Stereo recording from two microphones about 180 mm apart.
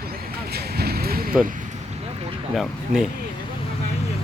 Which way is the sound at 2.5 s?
Centre (ahead or behind).